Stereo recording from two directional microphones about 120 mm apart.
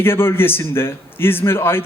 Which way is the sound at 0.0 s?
20° left (ahead or behind).